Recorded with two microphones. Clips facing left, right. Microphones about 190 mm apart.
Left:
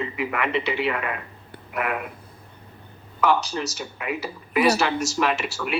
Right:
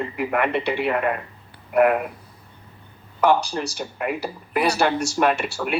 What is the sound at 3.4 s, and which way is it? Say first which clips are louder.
Speech: right 2 dB; 55° right (ahead or behind).